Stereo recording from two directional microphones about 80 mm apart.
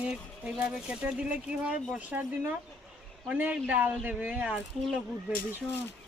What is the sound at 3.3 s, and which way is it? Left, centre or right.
Speech, centre.